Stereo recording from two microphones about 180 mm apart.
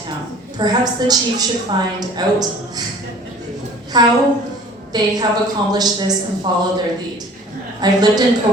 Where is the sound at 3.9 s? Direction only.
20° right (ahead or behind).